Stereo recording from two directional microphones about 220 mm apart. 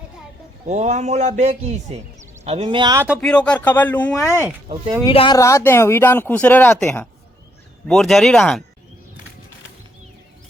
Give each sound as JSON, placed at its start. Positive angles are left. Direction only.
{"t": 0.7, "sound": "a man's voice", "side_deg": -30}
{"t": 3.2, "sound": "speech", "side_deg": 5}
{"t": 4.3, "sound": "speech", "side_deg": -10}
{"t": 5.0, "sound": "speech", "side_deg": 20}